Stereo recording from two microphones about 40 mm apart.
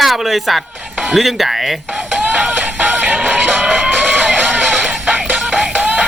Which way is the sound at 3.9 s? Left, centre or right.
Right.